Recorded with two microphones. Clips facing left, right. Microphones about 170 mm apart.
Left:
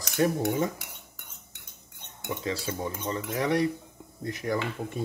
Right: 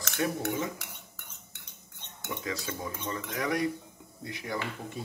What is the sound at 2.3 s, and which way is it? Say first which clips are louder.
Cutlery: left 4 dB; 30° left (ahead or behind).